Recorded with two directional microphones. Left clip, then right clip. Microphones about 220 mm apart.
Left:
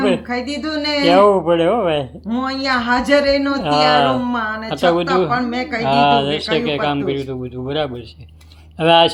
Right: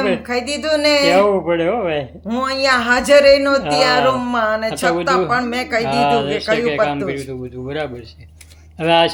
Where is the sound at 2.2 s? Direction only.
55° right (ahead or behind).